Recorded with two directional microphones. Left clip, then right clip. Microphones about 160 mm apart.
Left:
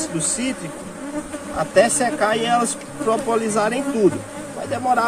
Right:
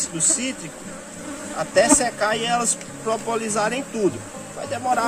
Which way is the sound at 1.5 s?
15° right (ahead or behind).